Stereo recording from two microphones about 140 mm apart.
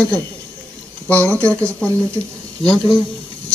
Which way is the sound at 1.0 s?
10° left (ahead or behind).